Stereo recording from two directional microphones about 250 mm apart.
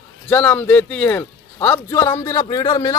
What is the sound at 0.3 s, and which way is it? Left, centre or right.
A man's voice, centre.